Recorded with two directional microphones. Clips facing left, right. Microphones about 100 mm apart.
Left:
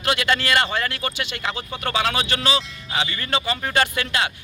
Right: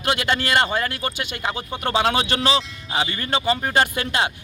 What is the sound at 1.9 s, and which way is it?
Speech, 30° right (ahead or behind).